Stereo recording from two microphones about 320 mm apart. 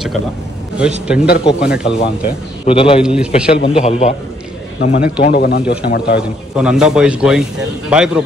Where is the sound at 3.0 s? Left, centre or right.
Centre.